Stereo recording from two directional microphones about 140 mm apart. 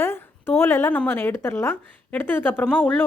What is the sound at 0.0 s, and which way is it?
Speech, 15° left (ahead or behind).